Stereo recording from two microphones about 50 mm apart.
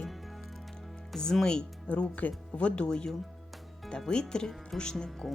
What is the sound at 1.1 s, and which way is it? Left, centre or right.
Speech, centre.